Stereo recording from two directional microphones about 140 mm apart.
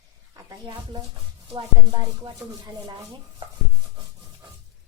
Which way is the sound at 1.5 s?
30° right (ahead or behind).